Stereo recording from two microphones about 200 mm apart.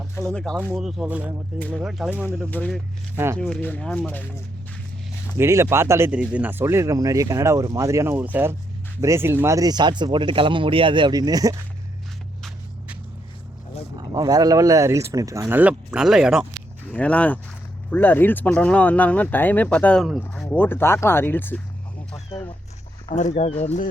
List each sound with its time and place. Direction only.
0.2 s speech: 5° left (ahead or behind)
1.5 s speech: 5° left (ahead or behind)
1.8 s speech: 5° right (ahead or behind)
2.4 s speech: 5° left (ahead or behind)
5.4 s speech: 15° right (ahead or behind)
13.9 s speech: 20° right (ahead or behind); by 21.6 s 10° left (ahead or behind)
22.1 s vehicle: 20° left (ahead or behind)
23.0 s speech: 35° left (ahead or behind)